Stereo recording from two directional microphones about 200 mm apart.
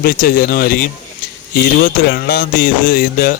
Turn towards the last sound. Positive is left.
turn(degrees=45)  # may be behind; listen again after turning